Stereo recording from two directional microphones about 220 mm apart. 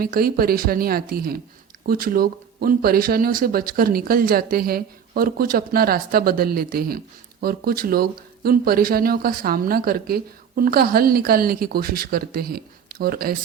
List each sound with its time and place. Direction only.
0.0 s speech: 40° right (ahead or behind)